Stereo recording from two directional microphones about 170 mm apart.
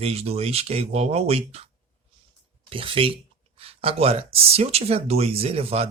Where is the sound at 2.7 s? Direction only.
30° right (ahead or behind).